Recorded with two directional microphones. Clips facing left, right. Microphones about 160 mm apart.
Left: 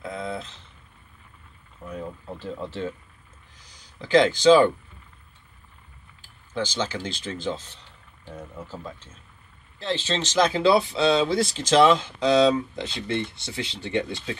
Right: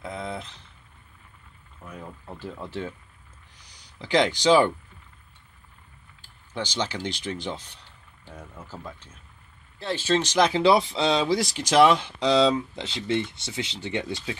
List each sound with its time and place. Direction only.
0.0 s speech: 20° right (ahead or behind)
2.3 s speech: 15° right (ahead or behind)
3.5 s a sound: 15° right (ahead or behind)
6.5 s speech: 15° right (ahead or behind)
9.8 s speech: 10° right (ahead or behind)